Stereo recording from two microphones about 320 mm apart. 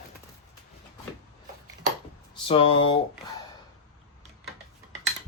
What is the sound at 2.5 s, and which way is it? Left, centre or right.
Speech, centre.